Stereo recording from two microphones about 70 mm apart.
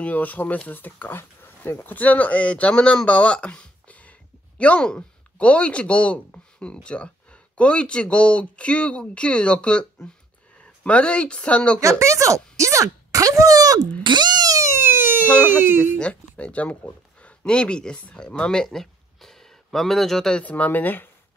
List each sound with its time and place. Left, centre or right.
0.0 s speech: left
11.8 s speech: right
14.1 s a sound: right
14.6 s fire alarm: right
15.2 s speech: centre
15.6 s speech: right
16.0 s a sound: centre
17.2 s speech: centre
20.4 s speech: left